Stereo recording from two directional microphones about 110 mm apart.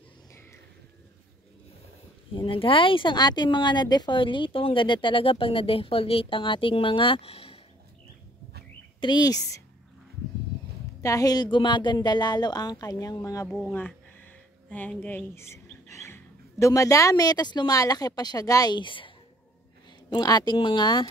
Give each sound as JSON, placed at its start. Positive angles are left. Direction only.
{"t": 2.3, "sound": "speech", "side_deg": 50}
{"t": 9.0, "sound": "a woman's voice", "side_deg": 40}
{"t": 11.0, "sound": "a woman's voice", "side_deg": 30}
{"t": 13.5, "sound": "speech", "side_deg": 5}
{"t": 13.7, "sound": "speech", "side_deg": 15}
{"t": 20.1, "sound": "a woman's voice", "side_deg": 40}